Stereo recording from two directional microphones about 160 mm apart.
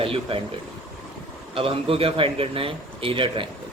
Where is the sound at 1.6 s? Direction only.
35° right (ahead or behind).